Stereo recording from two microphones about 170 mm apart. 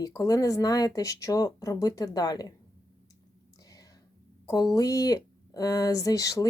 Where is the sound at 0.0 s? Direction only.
20° left (ahead or behind).